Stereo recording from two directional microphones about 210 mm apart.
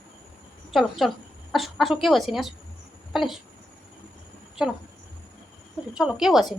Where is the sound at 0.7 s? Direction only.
Centre (ahead or behind).